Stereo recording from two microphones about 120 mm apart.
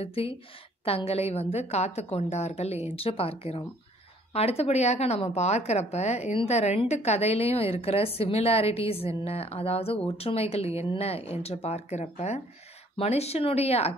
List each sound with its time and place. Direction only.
0.0 s a woman's voice: 55° left (ahead or behind)